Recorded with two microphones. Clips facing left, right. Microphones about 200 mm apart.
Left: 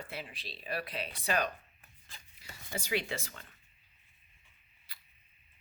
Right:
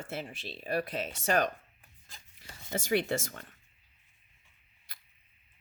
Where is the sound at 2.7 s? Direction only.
45° right (ahead or behind).